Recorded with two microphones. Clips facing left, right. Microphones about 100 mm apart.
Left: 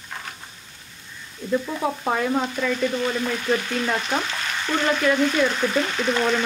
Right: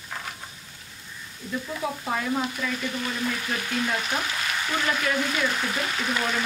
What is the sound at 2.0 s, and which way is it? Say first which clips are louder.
Frying: left 4 dB; 55° left (ahead or behind).